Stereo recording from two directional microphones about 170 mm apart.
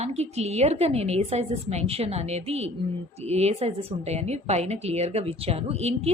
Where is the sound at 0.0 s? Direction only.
40° right (ahead or behind).